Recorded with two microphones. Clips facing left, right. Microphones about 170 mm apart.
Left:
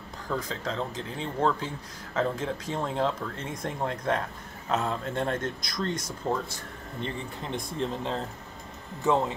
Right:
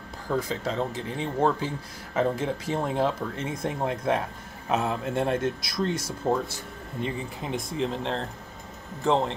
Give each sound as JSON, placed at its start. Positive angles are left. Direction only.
{"t": 0.3, "sound": "speech", "side_deg": -10}